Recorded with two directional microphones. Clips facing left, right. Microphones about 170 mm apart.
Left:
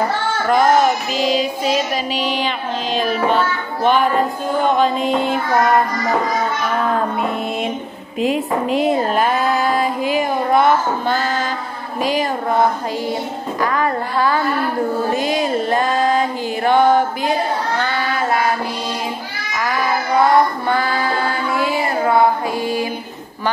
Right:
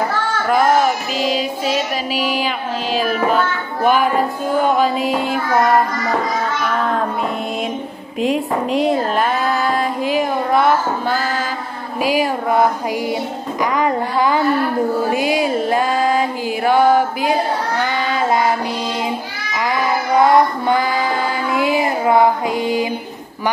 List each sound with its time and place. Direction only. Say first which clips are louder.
0.5 s speech: left 1 dB; 5° right (ahead or behind)
3.8 s music: even; 5° right (ahead or behind)
4.6 s speech: left 2 dB; 5° right (ahead or behind)
8.2 s speech: even; centre (ahead or behind)
12.0 s music: right 2 dB; 10° right (ahead or behind)
17.7 s child singing: right 1 dB; 15° right (ahead or behind)
19.5 s child singing: right 1 dB; 20° right (ahead or behind)